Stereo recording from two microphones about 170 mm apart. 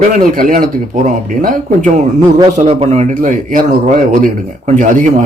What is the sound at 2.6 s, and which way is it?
Speech, 35° right (ahead or behind).